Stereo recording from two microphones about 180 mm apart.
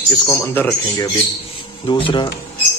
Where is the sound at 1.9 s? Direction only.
25° left (ahead or behind).